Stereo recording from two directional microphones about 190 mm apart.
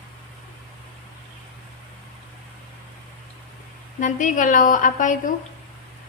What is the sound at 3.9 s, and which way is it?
A woman's voice, 40° left (ahead or behind).